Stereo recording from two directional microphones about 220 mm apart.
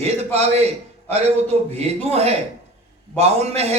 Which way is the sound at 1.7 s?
30° right (ahead or behind).